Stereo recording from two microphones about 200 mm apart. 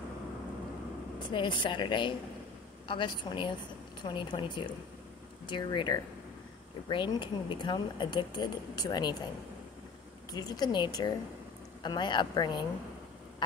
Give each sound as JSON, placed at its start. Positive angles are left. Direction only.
{"t": 1.3, "sound": "speech", "side_deg": 25}
{"t": 10.3, "sound": "speech", "side_deg": 20}